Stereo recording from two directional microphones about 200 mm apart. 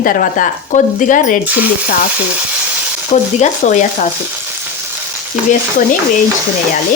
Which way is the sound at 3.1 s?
35° left (ahead or behind).